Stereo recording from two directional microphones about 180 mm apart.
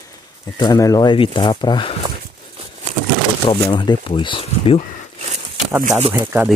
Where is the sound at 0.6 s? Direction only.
20° left (ahead or behind).